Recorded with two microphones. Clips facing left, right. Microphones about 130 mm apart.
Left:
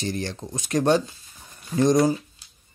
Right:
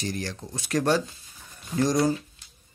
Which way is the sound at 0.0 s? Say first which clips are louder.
Left 3 dB; 25° left (ahead or behind).